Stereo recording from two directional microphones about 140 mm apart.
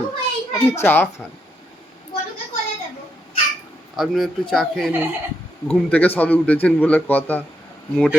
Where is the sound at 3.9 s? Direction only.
Centre (ahead or behind).